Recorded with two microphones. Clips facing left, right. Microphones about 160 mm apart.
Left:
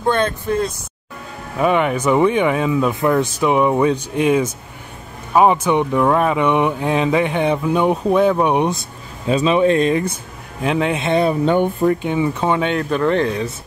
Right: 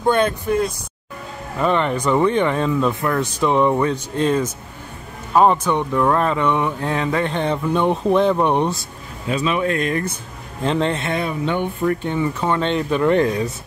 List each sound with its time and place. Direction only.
0.0 s speech: 10° right (ahead or behind)
1.6 s speech: 10° left (ahead or behind)
9.3 s speech: 25° left (ahead or behind)
10.6 s speech: 10° left (ahead or behind)
11.1 s speech: 35° left (ahead or behind)
11.8 s speech: 15° left (ahead or behind)
13.2 s speech: 40° right (ahead or behind)